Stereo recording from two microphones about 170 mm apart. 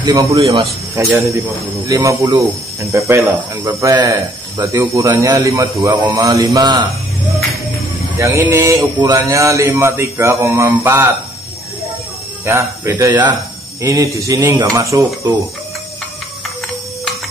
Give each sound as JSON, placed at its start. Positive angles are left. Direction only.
{"t": 0.0, "sound": "speech", "side_deg": -20}
{"t": 8.2, "sound": "speech", "side_deg": -15}
{"t": 12.4, "sound": "speech", "side_deg": -15}